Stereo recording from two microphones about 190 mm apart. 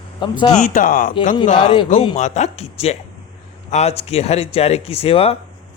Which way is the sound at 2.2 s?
40° left (ahead or behind).